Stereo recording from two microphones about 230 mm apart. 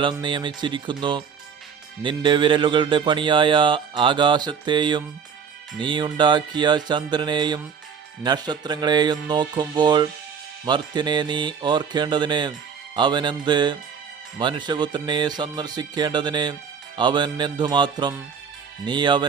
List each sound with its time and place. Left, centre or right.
0.0 s speech: right
2.0 s speech: right